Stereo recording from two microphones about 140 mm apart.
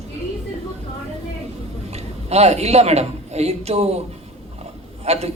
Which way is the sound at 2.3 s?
50° right (ahead or behind).